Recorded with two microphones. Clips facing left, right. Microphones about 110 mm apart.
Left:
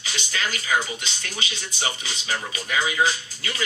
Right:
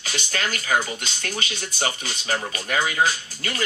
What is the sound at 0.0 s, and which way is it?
Speech, 50° right (ahead or behind).